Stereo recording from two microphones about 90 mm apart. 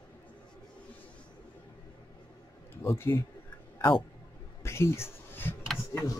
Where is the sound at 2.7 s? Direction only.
25° left (ahead or behind).